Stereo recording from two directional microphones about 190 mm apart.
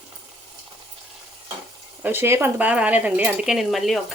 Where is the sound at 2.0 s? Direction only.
10° right (ahead or behind).